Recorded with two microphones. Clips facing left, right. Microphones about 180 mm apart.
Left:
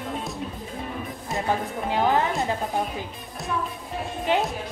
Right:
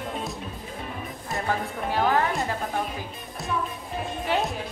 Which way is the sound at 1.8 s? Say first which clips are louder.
Left 1 dB; 20° left (ahead or behind).